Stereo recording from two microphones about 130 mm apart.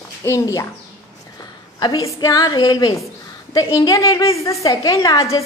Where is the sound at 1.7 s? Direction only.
30° left (ahead or behind).